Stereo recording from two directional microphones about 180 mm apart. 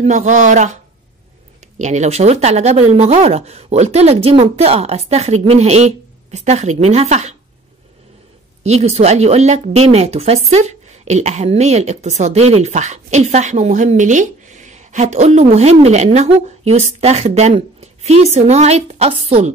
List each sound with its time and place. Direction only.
0.0 s speech: 40° right (ahead or behind)
1.8 s a woman's voice: 40° right (ahead or behind)
8.6 s a woman's voice: 35° right (ahead or behind)